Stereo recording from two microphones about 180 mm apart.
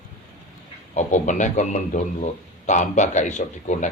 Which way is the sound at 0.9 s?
40° left (ahead or behind).